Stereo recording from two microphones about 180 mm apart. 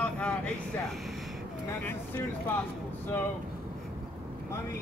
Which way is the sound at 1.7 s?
10° left (ahead or behind).